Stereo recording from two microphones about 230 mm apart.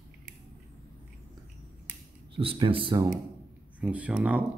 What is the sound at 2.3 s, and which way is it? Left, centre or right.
Speech, right.